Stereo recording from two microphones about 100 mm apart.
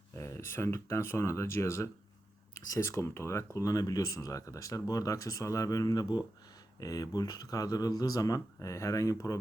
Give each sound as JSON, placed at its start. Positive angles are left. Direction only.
{"t": 0.2, "sound": "speech", "side_deg": 25}